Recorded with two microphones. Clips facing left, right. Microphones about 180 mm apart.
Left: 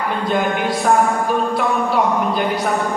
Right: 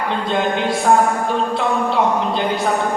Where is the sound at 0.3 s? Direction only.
25° right (ahead or behind).